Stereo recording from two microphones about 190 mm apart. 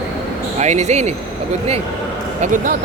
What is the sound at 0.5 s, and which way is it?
Speech, 35° right (ahead or behind).